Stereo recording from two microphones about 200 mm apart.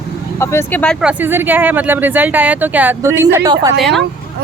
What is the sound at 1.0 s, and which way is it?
Speech, 10° right (ahead or behind).